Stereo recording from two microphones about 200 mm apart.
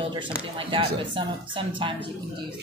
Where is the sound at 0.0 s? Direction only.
25° right (ahead or behind).